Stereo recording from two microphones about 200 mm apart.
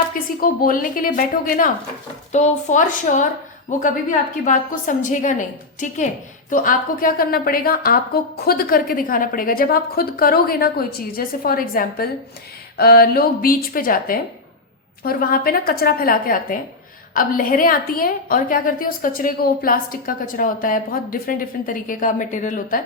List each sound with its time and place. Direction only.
0.1 s a woman's voice: 45° left (ahead or behind)
4.4 s a woman's voice: 40° left (ahead or behind)